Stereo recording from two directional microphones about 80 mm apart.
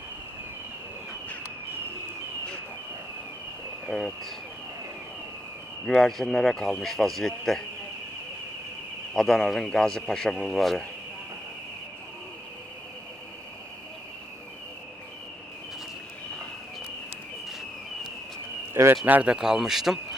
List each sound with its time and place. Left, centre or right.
3.8 s speech: centre
5.8 s speech: centre
9.1 s speech: centre
18.7 s a man's voice: right
19.0 s speech: centre